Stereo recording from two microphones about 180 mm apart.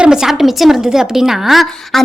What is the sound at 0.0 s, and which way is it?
A woman's voice, 5° right (ahead or behind).